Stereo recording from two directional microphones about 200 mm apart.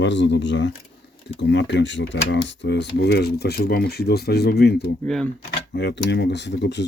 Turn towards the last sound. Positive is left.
turn(degrees=60)  # may be behind; listen again after turning